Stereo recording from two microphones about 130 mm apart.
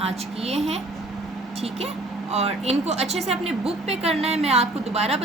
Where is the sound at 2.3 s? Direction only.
55° right (ahead or behind).